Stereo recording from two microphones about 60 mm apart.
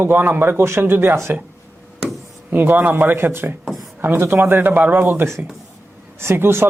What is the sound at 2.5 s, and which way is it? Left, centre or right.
A woman's voice, right.